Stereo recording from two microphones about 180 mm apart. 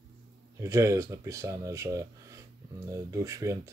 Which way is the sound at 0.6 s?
15° right (ahead or behind).